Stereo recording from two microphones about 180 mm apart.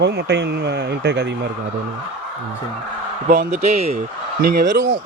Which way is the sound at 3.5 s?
40° right (ahead or behind).